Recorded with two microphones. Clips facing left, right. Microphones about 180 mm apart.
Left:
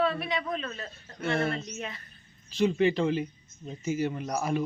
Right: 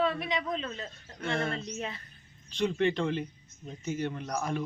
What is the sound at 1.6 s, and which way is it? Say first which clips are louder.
Speech: right 1 dB; 30° right (ahead or behind).